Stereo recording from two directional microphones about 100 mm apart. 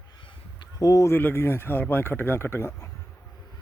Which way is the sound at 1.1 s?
20° left (ahead or behind).